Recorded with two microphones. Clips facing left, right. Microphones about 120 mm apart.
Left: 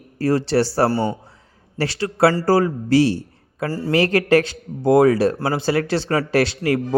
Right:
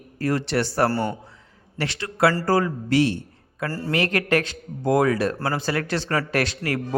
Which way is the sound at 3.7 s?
15° left (ahead or behind).